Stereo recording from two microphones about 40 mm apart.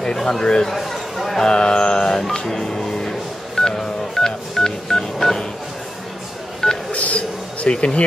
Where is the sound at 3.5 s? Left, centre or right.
Centre.